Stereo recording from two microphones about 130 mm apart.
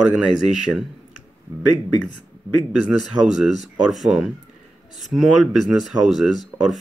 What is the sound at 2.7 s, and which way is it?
Speech, centre (ahead or behind).